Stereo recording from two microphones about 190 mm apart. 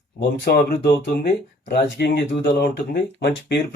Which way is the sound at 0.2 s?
60° left (ahead or behind).